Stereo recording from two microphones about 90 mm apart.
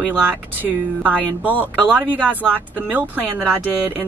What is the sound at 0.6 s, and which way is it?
Speech, 15° right (ahead or behind).